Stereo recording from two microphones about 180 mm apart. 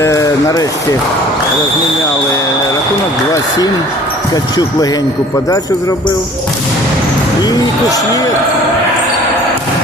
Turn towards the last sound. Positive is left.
turn(degrees=20)  # may be behind; listen again after turning